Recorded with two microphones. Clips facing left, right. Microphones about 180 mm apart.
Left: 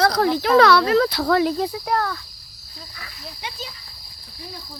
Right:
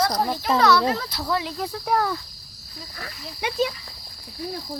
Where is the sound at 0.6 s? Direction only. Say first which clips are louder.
Left 5 dB; 75° left (ahead or behind).